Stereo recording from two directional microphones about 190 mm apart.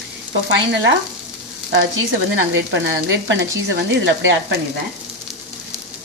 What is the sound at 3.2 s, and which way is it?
Sizzle, 70° right (ahead or behind).